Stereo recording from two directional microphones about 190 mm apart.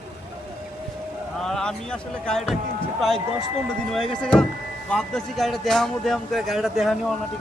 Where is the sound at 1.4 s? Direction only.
5° left (ahead or behind).